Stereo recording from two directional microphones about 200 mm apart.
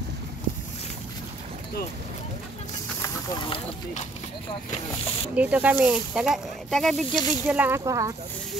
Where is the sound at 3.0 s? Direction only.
20° left (ahead or behind).